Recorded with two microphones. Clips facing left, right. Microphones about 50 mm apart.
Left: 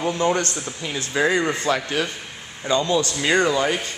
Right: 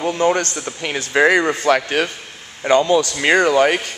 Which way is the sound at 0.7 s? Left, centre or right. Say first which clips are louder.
Right 7 dB; right.